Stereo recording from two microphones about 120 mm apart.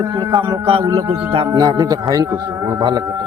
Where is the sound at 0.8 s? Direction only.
25° right (ahead or behind).